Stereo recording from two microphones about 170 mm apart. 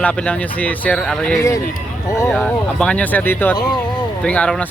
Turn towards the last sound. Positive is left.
turn(degrees=5)  # may be behind; listen again after turning